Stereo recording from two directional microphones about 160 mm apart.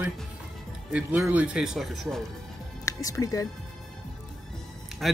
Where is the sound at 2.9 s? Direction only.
20° left (ahead or behind).